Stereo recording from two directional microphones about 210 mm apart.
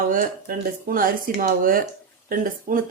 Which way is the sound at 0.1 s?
40° right (ahead or behind).